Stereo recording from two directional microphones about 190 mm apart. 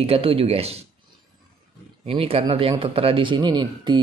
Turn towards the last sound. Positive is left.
turn(degrees=-25)  # may be behind; listen again after turning